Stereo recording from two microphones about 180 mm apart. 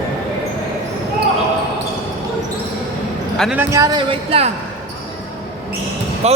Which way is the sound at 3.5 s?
15° right (ahead or behind).